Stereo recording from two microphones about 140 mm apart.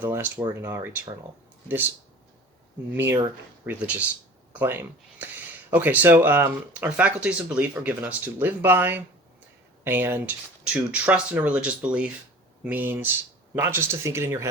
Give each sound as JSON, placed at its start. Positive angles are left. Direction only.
{"t": 0.0, "sound": "speech", "side_deg": -15}
{"t": 2.9, "sound": "speech", "side_deg": -15}